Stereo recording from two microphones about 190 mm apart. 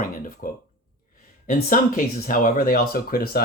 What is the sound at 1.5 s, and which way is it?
Speech, 45° left (ahead or behind).